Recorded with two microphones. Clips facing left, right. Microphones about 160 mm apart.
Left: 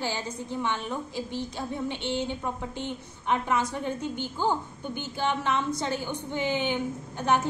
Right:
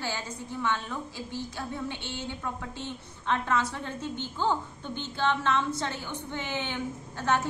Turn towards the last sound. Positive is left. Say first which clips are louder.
# left 2 dB
turn(degrees=15)  # may be behind; listen again after turning